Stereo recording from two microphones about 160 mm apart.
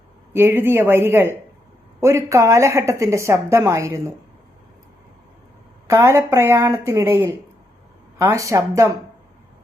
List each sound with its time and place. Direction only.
0.3 s a woman's voice: 15° right (ahead or behind)
5.9 s a woman's voice: 15° right (ahead or behind)